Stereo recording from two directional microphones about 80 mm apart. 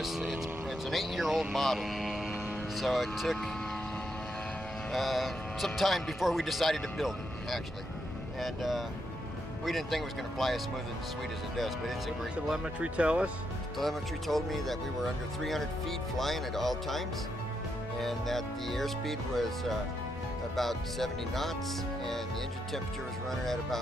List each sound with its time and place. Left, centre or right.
0.0 s speech: centre
4.9 s speech: centre
12.4 s speech: centre
13.7 s speech: centre
23.4 s speech: centre